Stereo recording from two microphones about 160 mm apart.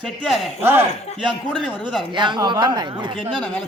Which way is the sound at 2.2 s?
30° right (ahead or behind).